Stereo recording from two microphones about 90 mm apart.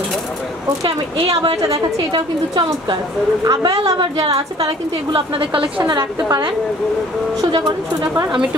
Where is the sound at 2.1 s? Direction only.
60° right (ahead or behind).